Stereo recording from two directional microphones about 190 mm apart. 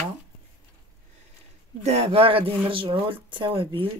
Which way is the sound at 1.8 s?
35° right (ahead or behind).